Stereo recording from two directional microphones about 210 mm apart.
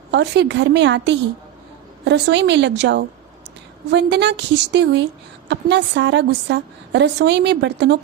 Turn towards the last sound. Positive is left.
turn(degrees=-55)  # may be behind; listen again after turning